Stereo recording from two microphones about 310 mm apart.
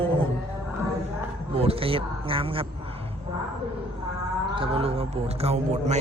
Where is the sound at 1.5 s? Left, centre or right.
Centre.